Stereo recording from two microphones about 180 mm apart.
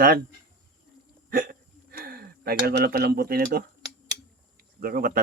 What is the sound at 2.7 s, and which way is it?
Speech, 60° right (ahead or behind).